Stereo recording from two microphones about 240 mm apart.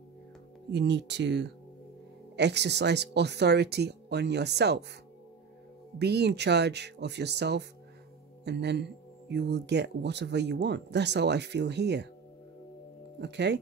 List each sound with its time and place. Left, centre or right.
0.7 s speech: right
5.9 s speech: right
13.2 s speech: right